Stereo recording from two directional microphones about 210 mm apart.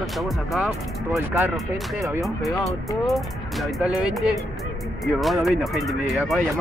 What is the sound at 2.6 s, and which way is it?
Speech, centre (ahead or behind).